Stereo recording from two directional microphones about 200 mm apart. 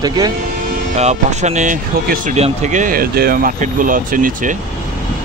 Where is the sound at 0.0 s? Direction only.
20° right (ahead or behind).